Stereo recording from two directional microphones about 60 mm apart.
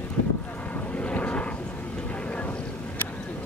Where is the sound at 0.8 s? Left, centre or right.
Left.